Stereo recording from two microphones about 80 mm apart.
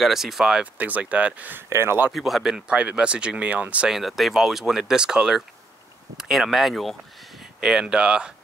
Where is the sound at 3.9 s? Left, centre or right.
Centre.